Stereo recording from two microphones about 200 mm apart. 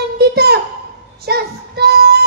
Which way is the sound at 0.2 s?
55° right (ahead or behind).